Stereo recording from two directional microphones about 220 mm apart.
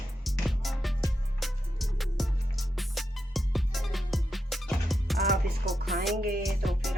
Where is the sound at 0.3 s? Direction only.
Centre (ahead or behind).